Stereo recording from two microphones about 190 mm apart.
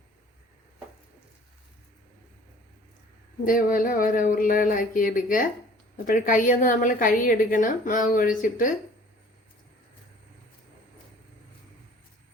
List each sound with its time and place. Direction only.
3.4 s a woman's voice: 45° left (ahead or behind)